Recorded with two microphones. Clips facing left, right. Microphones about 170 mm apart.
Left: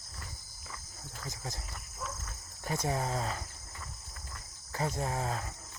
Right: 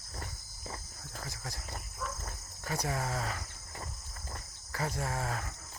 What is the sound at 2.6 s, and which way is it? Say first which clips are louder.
Speech: left 2 dB; 25° left (ahead or behind).